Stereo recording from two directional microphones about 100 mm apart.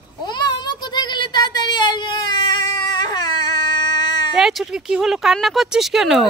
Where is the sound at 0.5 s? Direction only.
45° left (ahead or behind).